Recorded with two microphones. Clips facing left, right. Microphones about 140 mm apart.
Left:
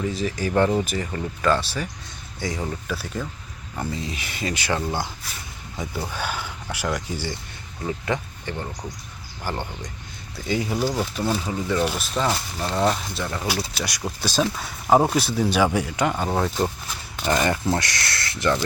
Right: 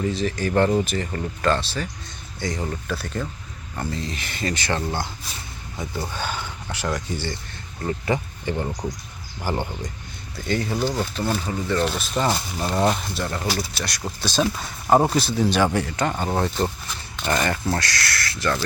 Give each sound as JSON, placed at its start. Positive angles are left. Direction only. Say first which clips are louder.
{"t": 0.1, "sound": "speech", "louder": "right 1 dB", "side_deg": 5}
{"t": 8.0, "sound": "speech", "louder": "right 3 dB", "side_deg": -10}
{"t": 10.3, "sound": "speech", "louder": "even", "side_deg": 5}